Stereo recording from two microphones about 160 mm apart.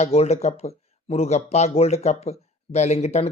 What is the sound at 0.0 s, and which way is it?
Speech, 40° left (ahead or behind).